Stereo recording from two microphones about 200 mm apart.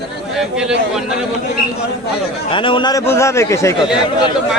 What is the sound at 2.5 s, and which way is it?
A man's voice, 25° left (ahead or behind).